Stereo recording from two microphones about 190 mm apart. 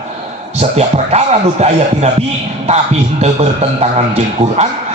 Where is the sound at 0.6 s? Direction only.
35° right (ahead or behind).